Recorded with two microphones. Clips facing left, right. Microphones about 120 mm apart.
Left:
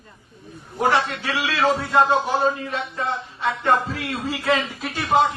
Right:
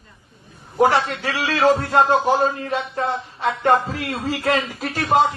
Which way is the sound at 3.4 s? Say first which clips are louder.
Right 3 dB; 40° right (ahead or behind).